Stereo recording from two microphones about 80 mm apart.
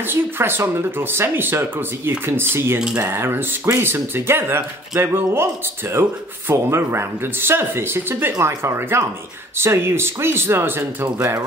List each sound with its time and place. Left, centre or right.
0.0 s speech: right
11.1 s speech: right